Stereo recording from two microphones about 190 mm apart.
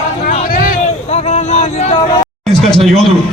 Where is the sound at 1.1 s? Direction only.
35° left (ahead or behind).